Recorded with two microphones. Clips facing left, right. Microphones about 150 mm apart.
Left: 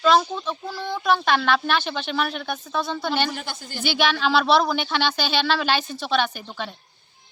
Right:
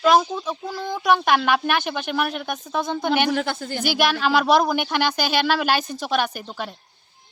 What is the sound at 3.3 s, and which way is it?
Speech, 60° right (ahead or behind).